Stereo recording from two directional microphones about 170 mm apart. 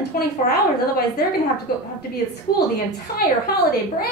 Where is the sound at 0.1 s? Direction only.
55° left (ahead or behind).